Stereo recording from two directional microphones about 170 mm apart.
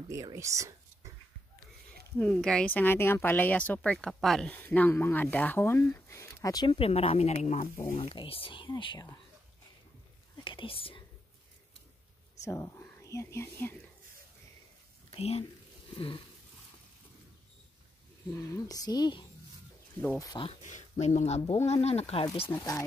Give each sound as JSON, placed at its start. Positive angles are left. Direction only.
{"t": 0.1, "sound": "speech", "side_deg": -20}
{"t": 2.1, "sound": "speech", "side_deg": 5}
{"t": 7.6, "sound": "speech", "side_deg": 20}
{"t": 7.9, "sound": "speech", "side_deg": 35}
{"t": 10.4, "sound": "speech", "side_deg": 30}
{"t": 12.4, "sound": "speech", "side_deg": 15}
{"t": 15.0, "sound": "speech", "side_deg": 35}
{"t": 18.5, "sound": "speech", "side_deg": 20}
{"t": 20.4, "sound": "speech", "side_deg": 45}
{"t": 22.2, "sound": "speech", "side_deg": 25}